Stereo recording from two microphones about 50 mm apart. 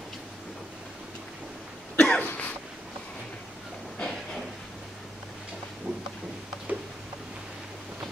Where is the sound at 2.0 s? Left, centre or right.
Left.